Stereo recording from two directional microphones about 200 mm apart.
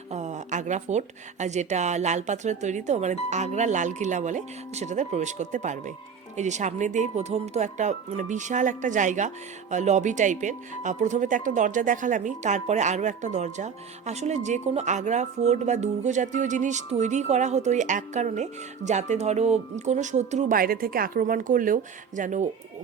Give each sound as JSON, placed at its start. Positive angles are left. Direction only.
{"t": 0.1, "sound": "speech", "side_deg": -35}